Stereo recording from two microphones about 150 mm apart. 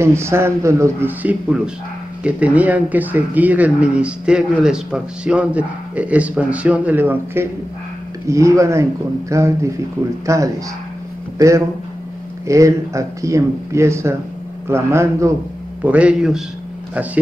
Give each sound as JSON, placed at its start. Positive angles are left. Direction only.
{"t": 0.0, "sound": "a man's voice", "side_deg": -20}